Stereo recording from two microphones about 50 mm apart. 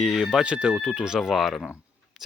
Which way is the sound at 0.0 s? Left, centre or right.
Centre.